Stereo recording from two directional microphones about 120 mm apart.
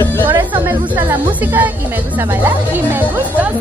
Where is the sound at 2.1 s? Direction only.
15° right (ahead or behind).